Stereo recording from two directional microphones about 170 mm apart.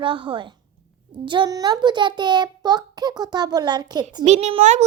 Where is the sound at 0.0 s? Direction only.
30° right (ahead or behind).